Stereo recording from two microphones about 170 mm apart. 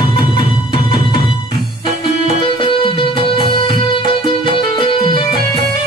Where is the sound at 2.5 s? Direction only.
30° left (ahead or behind).